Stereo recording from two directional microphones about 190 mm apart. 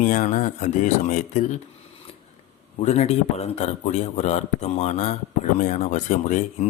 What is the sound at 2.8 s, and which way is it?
Speech, 35° left (ahead or behind).